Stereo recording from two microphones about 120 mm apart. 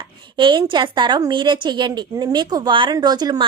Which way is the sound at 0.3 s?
40° right (ahead or behind).